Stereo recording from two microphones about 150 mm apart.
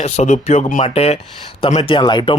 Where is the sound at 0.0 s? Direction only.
50° left (ahead or behind); by 2.4 s 30° left (ahead or behind).